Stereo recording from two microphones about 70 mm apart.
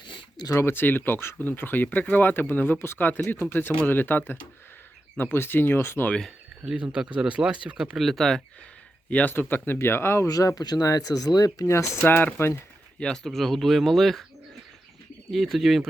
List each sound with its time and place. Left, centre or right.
0.5 s speech: left
6.1 s speech: centre
6.7 s speech: centre
7.9 s speech: centre
9.0 s speech: left
10.2 s speech: left
11.6 s speech: left
12.0 s speech: left
13.0 s speech: centre
15.3 s speech: centre